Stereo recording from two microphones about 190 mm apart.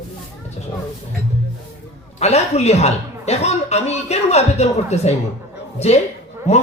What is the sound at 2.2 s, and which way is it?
Speech, 35° left (ahead or behind).